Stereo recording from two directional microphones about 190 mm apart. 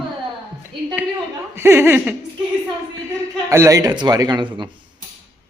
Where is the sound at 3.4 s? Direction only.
15° right (ahead or behind).